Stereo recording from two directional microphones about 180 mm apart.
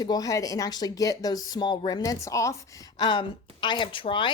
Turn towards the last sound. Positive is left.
turn(degrees=30)  # may be behind; listen again after turning